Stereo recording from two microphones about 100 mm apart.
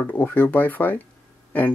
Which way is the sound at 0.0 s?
15° left (ahead or behind).